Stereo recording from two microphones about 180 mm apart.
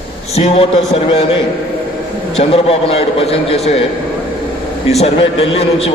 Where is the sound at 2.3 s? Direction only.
35° left (ahead or behind).